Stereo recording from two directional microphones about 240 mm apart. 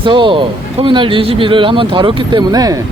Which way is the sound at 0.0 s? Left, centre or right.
Centre.